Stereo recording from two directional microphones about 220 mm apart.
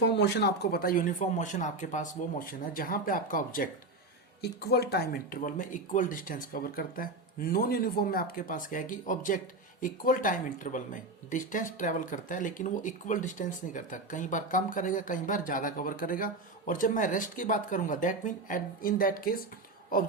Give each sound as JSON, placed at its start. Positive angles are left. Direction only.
{"t": 0.0, "sound": "speech", "side_deg": 50}